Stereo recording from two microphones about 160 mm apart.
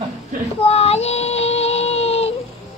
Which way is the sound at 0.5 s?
40° left (ahead or behind).